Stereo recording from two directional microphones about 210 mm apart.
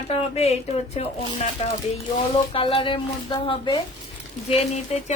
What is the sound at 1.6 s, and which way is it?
Speech, 30° left (ahead or behind).